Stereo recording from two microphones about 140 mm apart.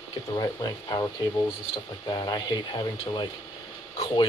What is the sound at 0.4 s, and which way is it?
Speech, 30° left (ahead or behind).